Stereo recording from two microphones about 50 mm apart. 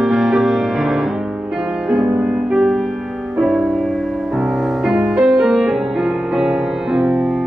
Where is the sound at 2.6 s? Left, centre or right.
Centre.